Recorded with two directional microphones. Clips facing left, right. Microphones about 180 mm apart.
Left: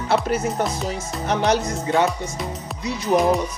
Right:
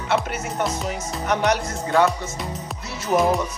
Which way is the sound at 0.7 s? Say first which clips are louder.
Even; centre (ahead or behind).